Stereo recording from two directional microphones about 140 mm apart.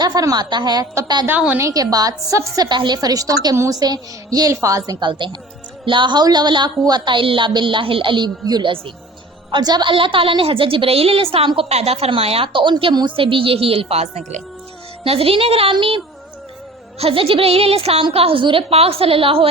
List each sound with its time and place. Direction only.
0.0 s a woman's voice: 25° right (ahead or behind)
1.3 s a woman's voice: 10° right (ahead or behind); by 14.4 s 55° right (ahead or behind)
15.0 s a woman's voice: 45° right (ahead or behind)
17.0 s a woman's voice: 40° right (ahead or behind)